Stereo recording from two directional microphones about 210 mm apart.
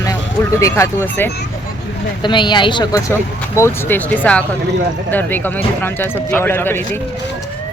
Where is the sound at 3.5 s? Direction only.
10° left (ahead or behind).